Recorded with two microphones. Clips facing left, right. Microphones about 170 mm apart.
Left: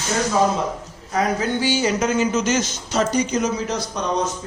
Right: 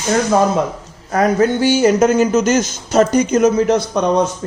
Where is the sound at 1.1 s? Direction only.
55° right (ahead or behind).